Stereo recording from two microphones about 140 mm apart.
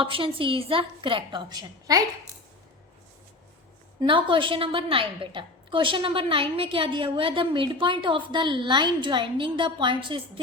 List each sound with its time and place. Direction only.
0.0 s a woman's voice: 40° right (ahead or behind)
4.0 s a woman's voice: 35° right (ahead or behind)